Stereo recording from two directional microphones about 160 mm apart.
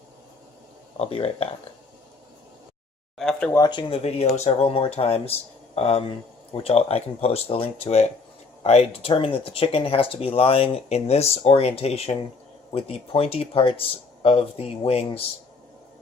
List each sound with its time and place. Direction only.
0.9 s speech: 40° left (ahead or behind)
3.2 s speech: 5° left (ahead or behind)
3.5 s speech: 25° left (ahead or behind)